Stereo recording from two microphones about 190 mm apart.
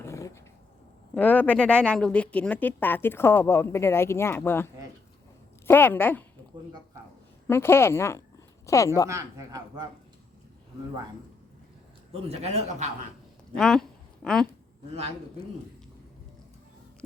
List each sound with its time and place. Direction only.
0.0 s a sound: 15° left (ahead or behind)
1.1 s speech: 10° left (ahead or behind)
7.4 s speech: 10° left (ahead or behind)
9.0 s speech: 15° right (ahead or behind)
12.3 s a man's voice: 35° right (ahead or behind)
13.6 s a sound: 5° left (ahead or behind)